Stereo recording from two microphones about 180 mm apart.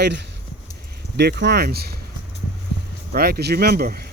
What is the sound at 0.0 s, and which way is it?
Speech, 65° right (ahead or behind).